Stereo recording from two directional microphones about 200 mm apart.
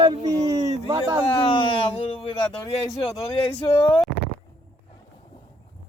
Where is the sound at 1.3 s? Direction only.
25° left (ahead or behind).